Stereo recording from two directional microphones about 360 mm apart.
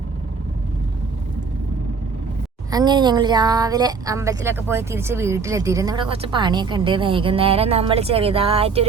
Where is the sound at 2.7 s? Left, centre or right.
Centre.